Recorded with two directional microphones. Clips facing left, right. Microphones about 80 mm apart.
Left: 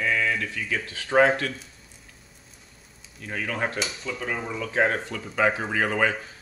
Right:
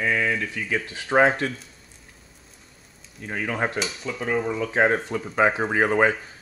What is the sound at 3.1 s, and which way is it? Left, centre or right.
Speech, centre.